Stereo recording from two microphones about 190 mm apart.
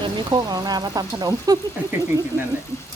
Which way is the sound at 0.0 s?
20° right (ahead or behind).